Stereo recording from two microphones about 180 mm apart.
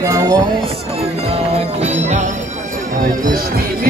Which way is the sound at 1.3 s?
35° right (ahead or behind).